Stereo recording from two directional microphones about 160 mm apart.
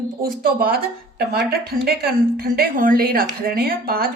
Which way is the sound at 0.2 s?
65° right (ahead or behind).